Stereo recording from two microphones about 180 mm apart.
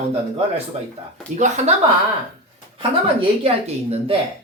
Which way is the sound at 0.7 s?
35° right (ahead or behind).